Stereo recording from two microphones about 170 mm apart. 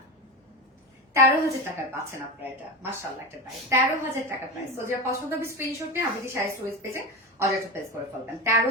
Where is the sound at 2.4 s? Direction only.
15° right (ahead or behind).